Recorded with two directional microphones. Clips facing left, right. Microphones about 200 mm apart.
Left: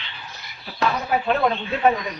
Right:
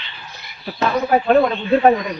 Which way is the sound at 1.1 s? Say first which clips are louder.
Right 8 dB; 45° right (ahead or behind).